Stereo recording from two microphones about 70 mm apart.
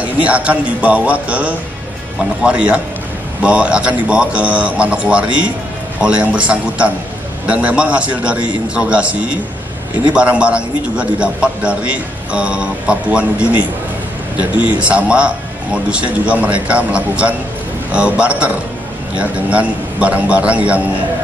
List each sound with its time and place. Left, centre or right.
0.0 s a man's voice: centre
14.7 s a man's voice: centre